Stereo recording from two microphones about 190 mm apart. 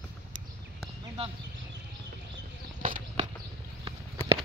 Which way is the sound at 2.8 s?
45° right (ahead or behind).